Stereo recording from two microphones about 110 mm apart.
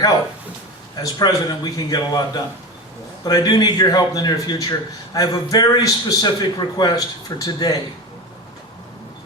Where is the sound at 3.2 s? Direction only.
35° left (ahead or behind).